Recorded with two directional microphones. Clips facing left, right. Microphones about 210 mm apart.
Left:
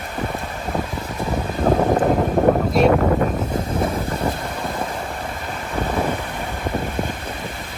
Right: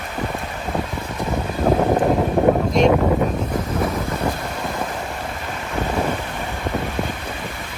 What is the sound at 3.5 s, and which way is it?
Boat, 30° left (ahead or behind).